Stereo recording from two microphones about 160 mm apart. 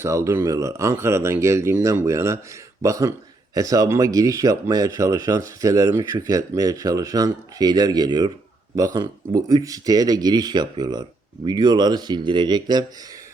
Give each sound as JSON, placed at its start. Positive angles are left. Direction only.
{"t": 0.0, "sound": "speech", "side_deg": -20}